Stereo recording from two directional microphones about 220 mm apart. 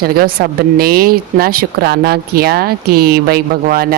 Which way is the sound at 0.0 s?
45° right (ahead or behind).